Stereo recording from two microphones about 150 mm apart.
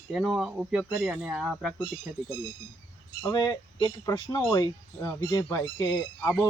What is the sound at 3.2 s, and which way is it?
Speech, 25° left (ahead or behind).